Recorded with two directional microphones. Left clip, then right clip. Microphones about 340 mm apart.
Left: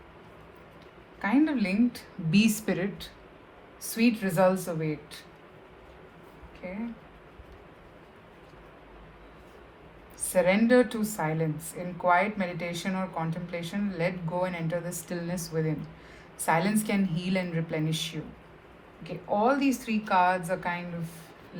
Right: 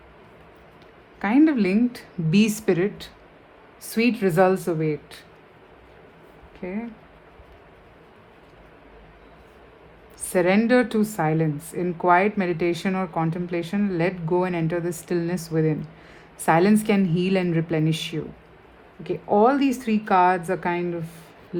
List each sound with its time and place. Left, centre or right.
1.2 s speech: right
10.2 s speech: right